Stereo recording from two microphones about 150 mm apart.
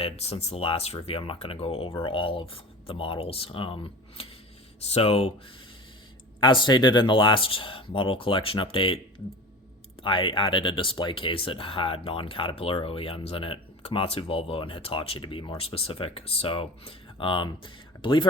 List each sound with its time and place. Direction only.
0.0 s speech: 45° left (ahead or behind)
6.4 s speech: 30° left (ahead or behind)
10.0 s speech: 35° left (ahead or behind)